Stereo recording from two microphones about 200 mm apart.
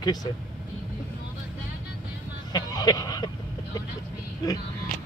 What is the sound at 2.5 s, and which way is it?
Vehicle, 20° left (ahead or behind).